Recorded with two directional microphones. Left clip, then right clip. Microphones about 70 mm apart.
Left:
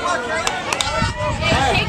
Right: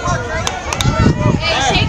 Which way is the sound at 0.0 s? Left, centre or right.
Centre.